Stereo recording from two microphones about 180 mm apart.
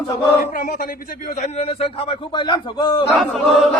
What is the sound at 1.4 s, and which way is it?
A man's voice, 35° left (ahead or behind).